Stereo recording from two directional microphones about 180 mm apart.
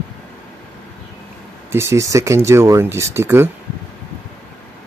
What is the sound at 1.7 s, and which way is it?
Speech, 15° right (ahead or behind).